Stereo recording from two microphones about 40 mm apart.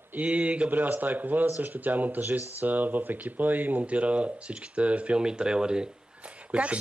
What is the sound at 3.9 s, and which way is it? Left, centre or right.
Speech, right.